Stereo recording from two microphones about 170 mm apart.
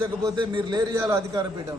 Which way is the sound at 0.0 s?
25° right (ahead or behind).